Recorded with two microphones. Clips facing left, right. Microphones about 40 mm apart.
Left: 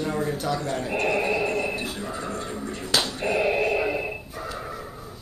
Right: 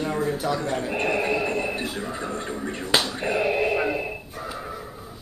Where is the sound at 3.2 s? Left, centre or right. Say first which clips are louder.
Even; centre.